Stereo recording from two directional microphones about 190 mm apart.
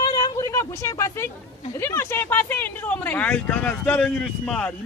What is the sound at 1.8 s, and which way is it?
Speech, 15° left (ahead or behind).